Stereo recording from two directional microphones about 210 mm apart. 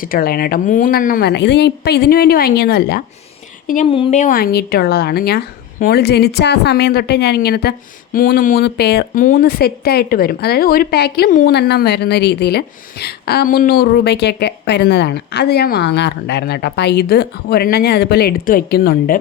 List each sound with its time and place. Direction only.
0.0 s speech: 45° left (ahead or behind)
3.8 s speech: 25° left (ahead or behind); by 19.2 s 45° left (ahead or behind)